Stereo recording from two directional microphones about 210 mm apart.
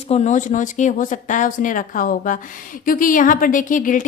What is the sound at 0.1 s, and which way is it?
A woman's voice, 35° left (ahead or behind).